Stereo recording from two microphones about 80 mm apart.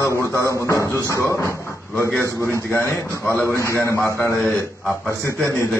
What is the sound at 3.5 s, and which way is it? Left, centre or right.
Speech, left.